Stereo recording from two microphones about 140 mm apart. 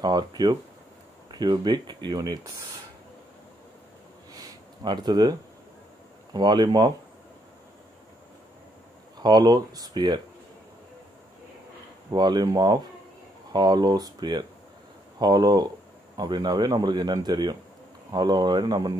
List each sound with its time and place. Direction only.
0.0 s speech: 30° right (ahead or behind)
4.3 s a sound: 30° right (ahead or behind)
6.3 s speech: 30° right (ahead or behind)
9.2 s speech: 30° right (ahead or behind)
12.1 s speech: 30° right (ahead or behind)